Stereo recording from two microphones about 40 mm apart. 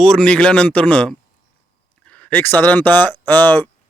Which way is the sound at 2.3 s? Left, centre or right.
Left.